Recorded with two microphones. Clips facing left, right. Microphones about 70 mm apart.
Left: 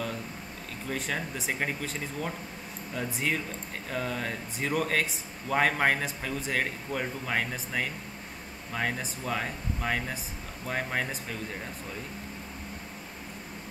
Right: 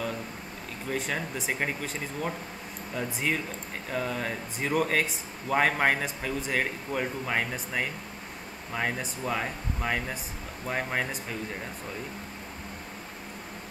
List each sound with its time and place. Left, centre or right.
0.8 s speech: centre